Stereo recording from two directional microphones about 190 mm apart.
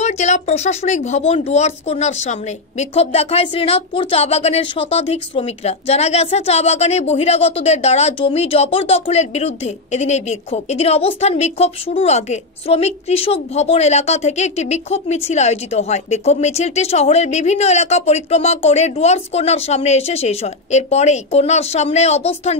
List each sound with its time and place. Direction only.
0.0 s speech: 35° left (ahead or behind)